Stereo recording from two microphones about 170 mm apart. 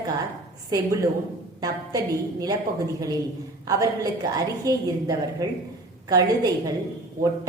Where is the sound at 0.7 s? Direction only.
20° right (ahead or behind).